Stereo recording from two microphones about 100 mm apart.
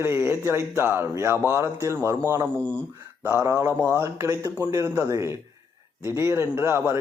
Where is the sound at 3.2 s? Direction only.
30° right (ahead or behind).